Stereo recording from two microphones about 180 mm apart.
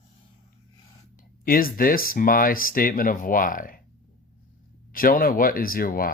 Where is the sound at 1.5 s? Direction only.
55° left (ahead or behind).